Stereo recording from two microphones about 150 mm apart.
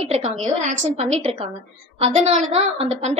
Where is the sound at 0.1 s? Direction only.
45° right (ahead or behind).